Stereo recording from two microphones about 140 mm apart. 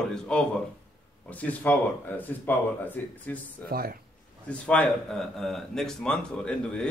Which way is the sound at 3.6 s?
90° right.